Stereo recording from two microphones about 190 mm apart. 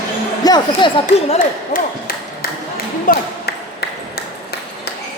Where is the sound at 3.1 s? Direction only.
55° left (ahead or behind).